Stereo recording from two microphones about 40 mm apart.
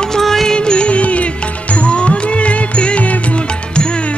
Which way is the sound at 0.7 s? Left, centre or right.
Left.